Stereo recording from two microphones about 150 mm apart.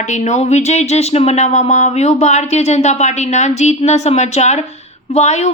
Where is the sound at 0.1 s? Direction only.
50° left (ahead or behind).